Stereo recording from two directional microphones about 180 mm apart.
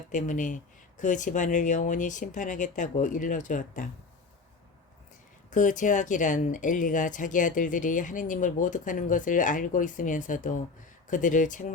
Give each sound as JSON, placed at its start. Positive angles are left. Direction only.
{"t": 0.1, "sound": "speech", "side_deg": 45}
{"t": 5.5, "sound": "speech", "side_deg": 45}